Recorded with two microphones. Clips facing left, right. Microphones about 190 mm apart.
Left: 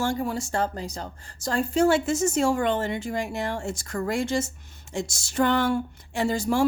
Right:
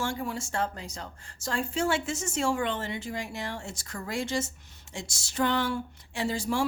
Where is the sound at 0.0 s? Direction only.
40° left (ahead or behind).